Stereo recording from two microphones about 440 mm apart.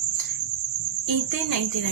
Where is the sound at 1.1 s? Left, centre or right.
Right.